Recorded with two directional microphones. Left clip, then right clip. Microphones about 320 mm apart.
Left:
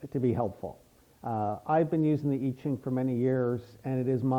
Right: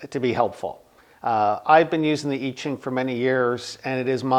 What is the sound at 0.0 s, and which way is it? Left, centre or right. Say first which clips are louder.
Speech: right 8 dB; centre.